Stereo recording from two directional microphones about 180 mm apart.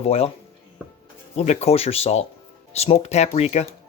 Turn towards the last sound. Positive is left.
turn(degrees=35)  # may be behind; listen again after turning